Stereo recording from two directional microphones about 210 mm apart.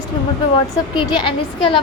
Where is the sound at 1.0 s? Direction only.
20° left (ahead or behind).